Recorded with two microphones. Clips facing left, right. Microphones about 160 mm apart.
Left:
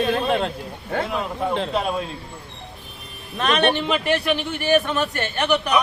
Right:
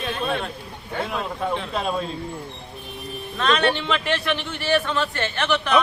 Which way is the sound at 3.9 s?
10° left (ahead or behind).